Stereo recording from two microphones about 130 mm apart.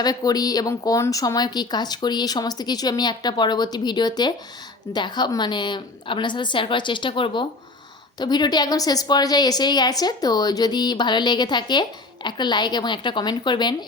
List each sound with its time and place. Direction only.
0.0 s a woman's voice: 30° left (ahead or behind)